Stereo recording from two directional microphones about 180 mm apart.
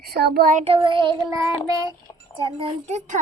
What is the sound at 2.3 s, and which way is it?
Speech, 25° right (ahead or behind).